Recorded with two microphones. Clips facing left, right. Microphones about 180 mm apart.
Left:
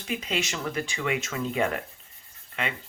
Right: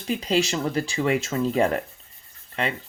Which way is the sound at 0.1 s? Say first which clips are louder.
Right 7 dB; 35° right (ahead or behind).